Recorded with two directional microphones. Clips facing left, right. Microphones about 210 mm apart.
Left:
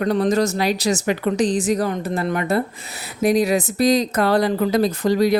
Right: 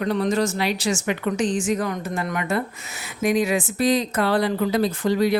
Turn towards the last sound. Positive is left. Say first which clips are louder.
# left 3 dB
turn(degrees=40)  # may be behind; listen again after turning